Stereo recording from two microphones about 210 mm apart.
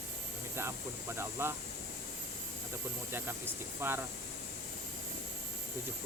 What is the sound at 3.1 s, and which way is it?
Speech, 10° right (ahead or behind).